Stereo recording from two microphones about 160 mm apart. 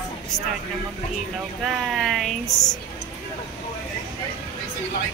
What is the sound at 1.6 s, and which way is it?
Speech, centre (ahead or behind).